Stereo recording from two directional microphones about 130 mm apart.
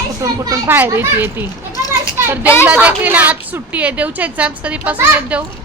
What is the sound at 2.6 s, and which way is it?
A woman's voice, 10° right (ahead or behind).